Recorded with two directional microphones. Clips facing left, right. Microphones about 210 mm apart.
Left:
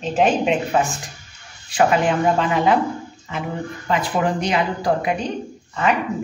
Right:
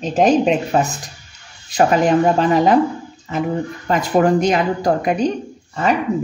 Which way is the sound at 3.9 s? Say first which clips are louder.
Right 6 dB; 45° right (ahead or behind).